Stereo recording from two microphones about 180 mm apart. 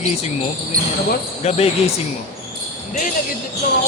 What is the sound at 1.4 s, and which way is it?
Speech, 35° left (ahead or behind).